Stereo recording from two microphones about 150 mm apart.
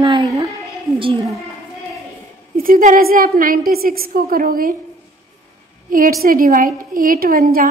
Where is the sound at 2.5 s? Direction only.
70° right (ahead or behind).